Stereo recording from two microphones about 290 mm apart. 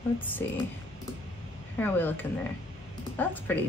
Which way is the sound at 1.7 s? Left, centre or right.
Centre.